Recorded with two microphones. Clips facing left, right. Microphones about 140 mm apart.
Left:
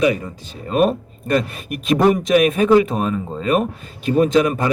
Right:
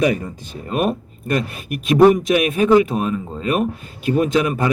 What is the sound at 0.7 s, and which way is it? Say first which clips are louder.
Speech: left 4 dB; 35° left (ahead or behind).